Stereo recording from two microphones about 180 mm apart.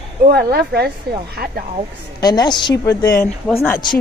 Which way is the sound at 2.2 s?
20° left (ahead or behind).